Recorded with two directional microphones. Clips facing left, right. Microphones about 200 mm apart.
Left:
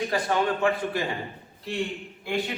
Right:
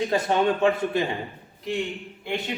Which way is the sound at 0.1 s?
20° right (ahead or behind).